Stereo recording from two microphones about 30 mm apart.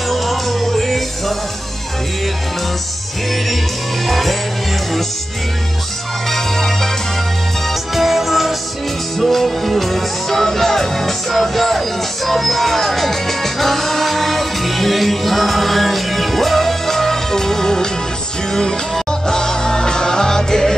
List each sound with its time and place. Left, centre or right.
0.1 s music: centre
4.0 s music: centre
6.3 s music: centre
7.9 s music: centre
9.3 s music: centre